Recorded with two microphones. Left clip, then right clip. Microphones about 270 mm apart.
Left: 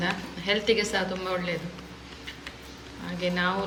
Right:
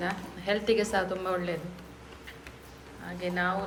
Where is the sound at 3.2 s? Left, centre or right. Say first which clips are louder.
Left 3 dB; centre.